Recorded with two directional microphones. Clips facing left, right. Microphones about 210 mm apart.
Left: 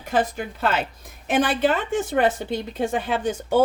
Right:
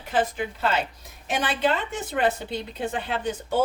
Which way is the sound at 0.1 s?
45° left (ahead or behind).